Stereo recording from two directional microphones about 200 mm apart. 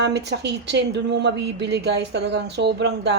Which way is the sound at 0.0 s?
55° right (ahead or behind).